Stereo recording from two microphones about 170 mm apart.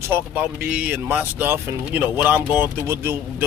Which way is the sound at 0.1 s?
10° right (ahead or behind).